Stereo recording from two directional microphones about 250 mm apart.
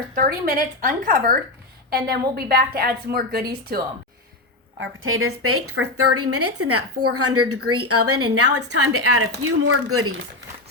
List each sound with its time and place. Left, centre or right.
0.1 s a woman's voice: right
4.8 s a woman's voice: right